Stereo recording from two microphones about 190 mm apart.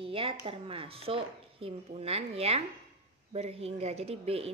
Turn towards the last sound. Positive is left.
turn(degrees=-30)  # may be behind; listen again after turning